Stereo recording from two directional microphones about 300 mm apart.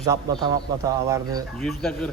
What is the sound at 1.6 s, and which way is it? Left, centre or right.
Speech, centre.